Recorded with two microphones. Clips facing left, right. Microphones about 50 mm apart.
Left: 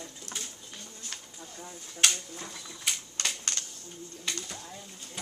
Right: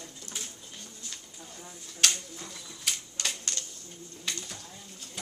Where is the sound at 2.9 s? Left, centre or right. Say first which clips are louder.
Left 1 dB; centre.